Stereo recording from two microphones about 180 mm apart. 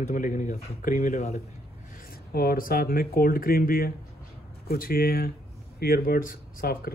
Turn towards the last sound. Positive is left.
turn(degrees=55)  # may be behind; listen again after turning